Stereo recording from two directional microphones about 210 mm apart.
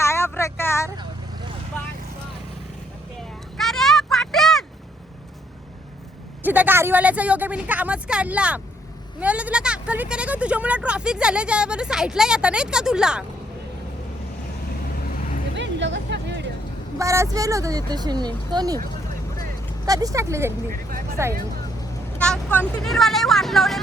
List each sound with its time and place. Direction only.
0.0 s vehicle: 10° left (ahead or behind)
3.6 s a sound: centre (ahead or behind)
6.4 s speech: 10° right (ahead or behind)
15.5 s music: 55° right (ahead or behind)
17.0 s speech: 15° right (ahead or behind)
19.8 s speech: 15° right (ahead or behind)
22.2 s speech: 5° left (ahead or behind)